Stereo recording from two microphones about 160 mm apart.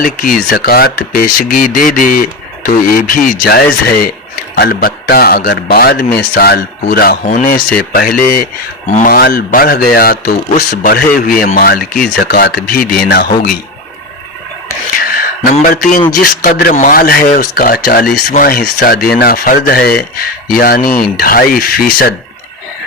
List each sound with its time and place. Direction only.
0.0 s speech: 60° left (ahead or behind)
7.3 s speech: 50° left (ahead or behind)
7.8 s speech: 65° left (ahead or behind)
15.1 s speech: 65° left (ahead or behind)